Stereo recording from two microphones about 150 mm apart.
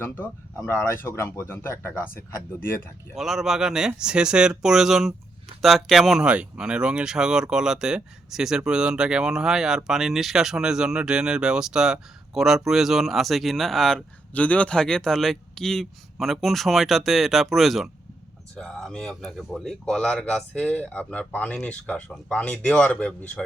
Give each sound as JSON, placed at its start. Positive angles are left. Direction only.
{"t": 0.7, "sound": "speech", "side_deg": 20}
{"t": 3.2, "sound": "speech", "side_deg": 0}